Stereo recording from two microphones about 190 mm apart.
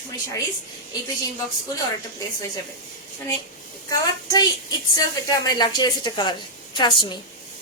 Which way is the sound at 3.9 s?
20° left (ahead or behind).